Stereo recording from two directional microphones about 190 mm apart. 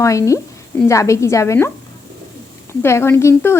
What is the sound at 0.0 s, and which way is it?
A woman's voice, 15° left (ahead or behind).